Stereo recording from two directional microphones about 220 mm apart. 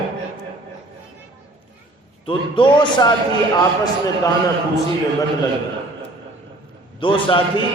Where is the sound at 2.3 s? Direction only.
20° left (ahead or behind).